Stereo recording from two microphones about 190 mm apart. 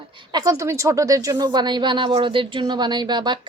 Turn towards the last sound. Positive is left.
turn(degrees=-25)  # may be behind; listen again after turning